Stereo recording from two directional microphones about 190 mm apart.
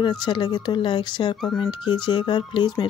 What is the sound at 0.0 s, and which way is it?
Speech, 25° left (ahead or behind).